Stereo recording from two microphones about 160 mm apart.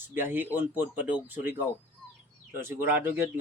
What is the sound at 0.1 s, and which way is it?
Speech, 10° right (ahead or behind).